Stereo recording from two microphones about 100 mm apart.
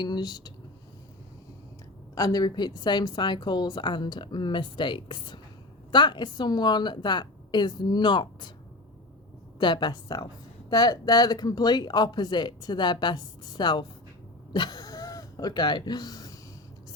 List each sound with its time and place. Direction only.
0.0 s a woman's voice: 45° left (ahead or behind)
2.1 s a woman's voice: 40° left (ahead or behind)
9.6 s a woman's voice: 50° left (ahead or behind)